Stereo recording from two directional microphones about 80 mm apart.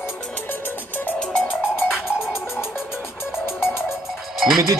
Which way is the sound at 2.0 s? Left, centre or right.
Centre.